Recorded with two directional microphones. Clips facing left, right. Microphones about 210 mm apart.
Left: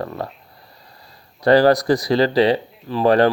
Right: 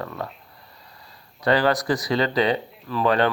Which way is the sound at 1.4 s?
40° left (ahead or behind).